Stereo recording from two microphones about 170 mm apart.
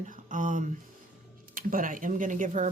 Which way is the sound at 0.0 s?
50° right (ahead or behind).